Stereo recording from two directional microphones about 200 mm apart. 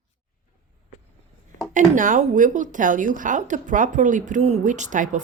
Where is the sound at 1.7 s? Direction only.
40° right (ahead or behind).